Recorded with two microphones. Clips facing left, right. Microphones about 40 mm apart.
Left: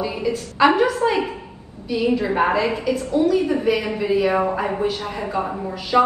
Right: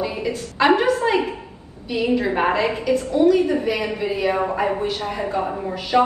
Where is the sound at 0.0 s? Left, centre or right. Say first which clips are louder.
Left 1 dB; right.